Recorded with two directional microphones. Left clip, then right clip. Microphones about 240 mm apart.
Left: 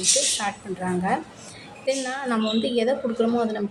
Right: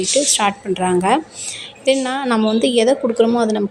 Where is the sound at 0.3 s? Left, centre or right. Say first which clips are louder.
Right 10 dB; right.